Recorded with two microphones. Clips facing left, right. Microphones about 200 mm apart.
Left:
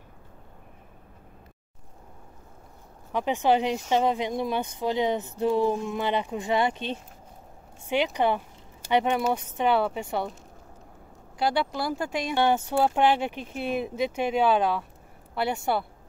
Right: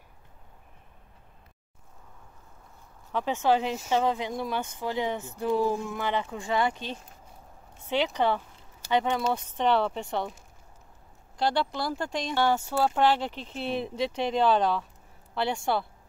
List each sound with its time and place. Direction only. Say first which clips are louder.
3.1 s speech: left 2 dB; 15° left (ahead or behind)
11.3 s speech: left 1 dB; 5° left (ahead or behind)
12.4 s speech: left 2 dB; 20° left (ahead or behind)